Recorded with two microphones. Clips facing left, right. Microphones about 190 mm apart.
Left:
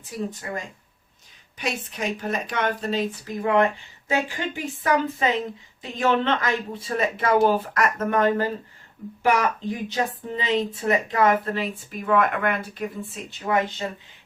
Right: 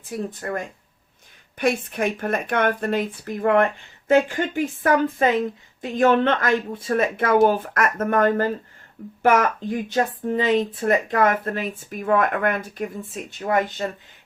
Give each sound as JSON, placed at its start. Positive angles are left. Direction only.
{"t": 0.4, "sound": "speech", "side_deg": -55}